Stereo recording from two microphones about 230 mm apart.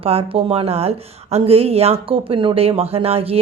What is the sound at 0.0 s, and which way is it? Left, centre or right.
A woman's voice, right.